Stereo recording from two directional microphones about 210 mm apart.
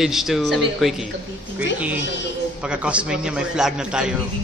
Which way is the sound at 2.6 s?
5° right (ahead or behind).